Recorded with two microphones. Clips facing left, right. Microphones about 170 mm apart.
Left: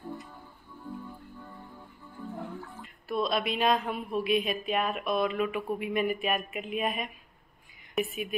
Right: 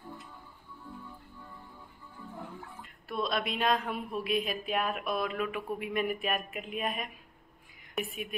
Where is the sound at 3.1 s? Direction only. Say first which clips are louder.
Left 4 dB; centre (ahead or behind).